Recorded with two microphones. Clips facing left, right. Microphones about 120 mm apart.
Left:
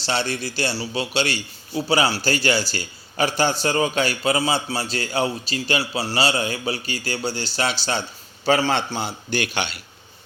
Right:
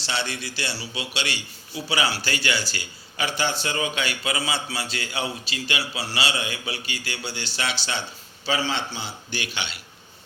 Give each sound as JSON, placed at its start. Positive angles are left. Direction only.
{"t": 0.0, "sound": "a man's voice", "side_deg": 40}